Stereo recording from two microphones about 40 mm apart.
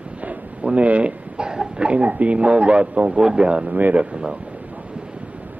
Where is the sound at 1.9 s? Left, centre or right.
Right.